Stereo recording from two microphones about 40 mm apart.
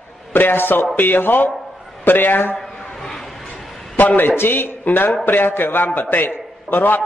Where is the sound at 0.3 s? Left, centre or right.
Left.